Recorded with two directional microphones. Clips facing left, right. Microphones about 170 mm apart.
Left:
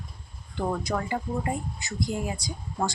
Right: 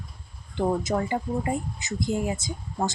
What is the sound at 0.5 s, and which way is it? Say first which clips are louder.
Speech: right 4 dB; 20° right (ahead or behind).